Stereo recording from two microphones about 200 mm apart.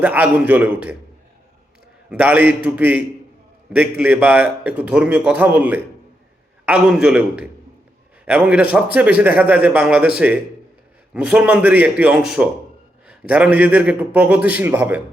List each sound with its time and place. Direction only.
0.0 s a man's voice: 5° right (ahead or behind)
2.0 s a man's voice: 5° right (ahead or behind)